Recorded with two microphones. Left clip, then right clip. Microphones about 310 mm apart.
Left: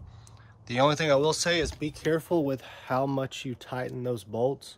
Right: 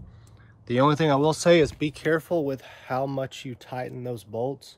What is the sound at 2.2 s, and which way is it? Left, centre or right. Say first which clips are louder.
Speech: right 1 dB; centre.